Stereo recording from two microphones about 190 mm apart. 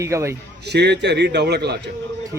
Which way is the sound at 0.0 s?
15° right (ahead or behind).